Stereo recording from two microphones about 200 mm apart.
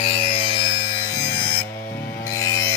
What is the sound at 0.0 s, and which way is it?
Electric shaver, 30° left (ahead or behind).